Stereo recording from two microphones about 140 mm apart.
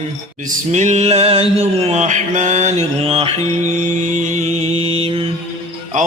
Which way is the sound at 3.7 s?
60° right (ahead or behind).